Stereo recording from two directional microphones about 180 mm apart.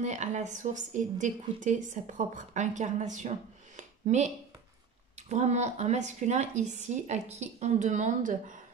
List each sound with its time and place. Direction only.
0.0 s a woman's voice: 40° right (ahead or behind)
5.3 s a woman's voice: 40° right (ahead or behind)